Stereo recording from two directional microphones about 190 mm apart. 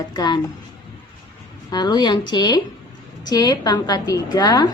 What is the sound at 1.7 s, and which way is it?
A woman's voice, 20° left (ahead or behind).